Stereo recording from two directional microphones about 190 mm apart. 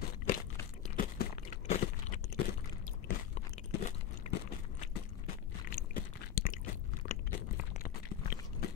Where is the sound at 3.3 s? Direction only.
35° left (ahead or behind).